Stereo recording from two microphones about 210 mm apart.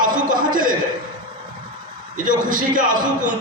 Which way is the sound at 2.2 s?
40° right (ahead or behind).